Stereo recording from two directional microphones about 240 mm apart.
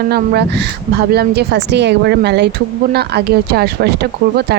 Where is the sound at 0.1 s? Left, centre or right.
Right.